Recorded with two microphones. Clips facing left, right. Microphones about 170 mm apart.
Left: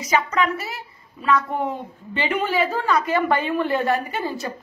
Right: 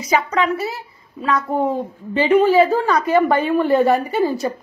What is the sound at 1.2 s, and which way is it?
A woman's voice, 35° right (ahead or behind).